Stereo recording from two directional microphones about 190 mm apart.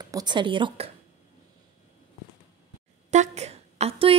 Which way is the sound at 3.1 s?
35° right (ahead or behind).